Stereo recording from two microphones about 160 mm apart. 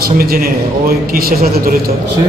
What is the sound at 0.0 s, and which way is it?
A man's voice, 65° right (ahead or behind).